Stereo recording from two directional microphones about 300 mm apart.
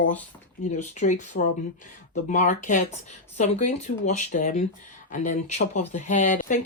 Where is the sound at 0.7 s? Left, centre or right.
Left.